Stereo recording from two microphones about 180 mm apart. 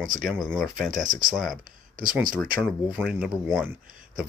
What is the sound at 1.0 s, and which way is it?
Speech, 45° right (ahead or behind).